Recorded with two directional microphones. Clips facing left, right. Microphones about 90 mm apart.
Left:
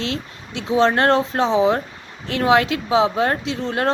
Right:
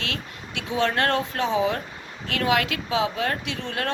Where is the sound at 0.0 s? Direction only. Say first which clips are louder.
Left 6 dB; 25° left (ahead or behind).